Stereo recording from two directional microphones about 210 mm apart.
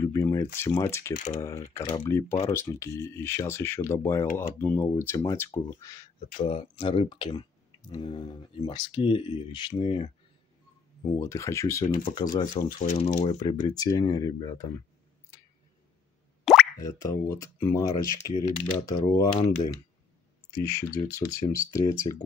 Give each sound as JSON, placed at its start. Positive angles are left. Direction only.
{"t": 0.0, "sound": "a sound", "side_deg": 15}
{"t": 0.6, "sound": "speech", "side_deg": 15}
{"t": 1.1, "sound": "speech", "side_deg": 35}
{"t": 1.4, "sound": "speech", "side_deg": 15}
{"t": 6.1, "sound": "speech", "side_deg": 35}
{"t": 6.4, "sound": "speech", "side_deg": 25}
{"t": 11.0, "sound": "speech", "side_deg": 15}
{"t": 12.8, "sound": "speech", "side_deg": 30}
{"t": 13.4, "sound": "speech", "side_deg": 20}
{"t": 16.7, "sound": "speech", "side_deg": 15}
{"t": 20.9, "sound": "speech", "side_deg": 15}